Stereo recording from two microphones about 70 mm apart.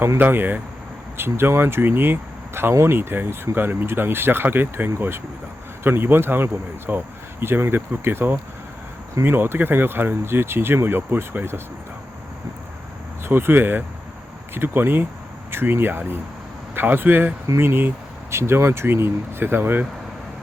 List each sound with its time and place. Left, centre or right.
0.2 s speech: right
13.2 s speech: right